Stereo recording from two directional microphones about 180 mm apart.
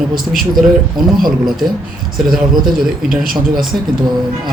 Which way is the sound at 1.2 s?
Centre (ahead or behind).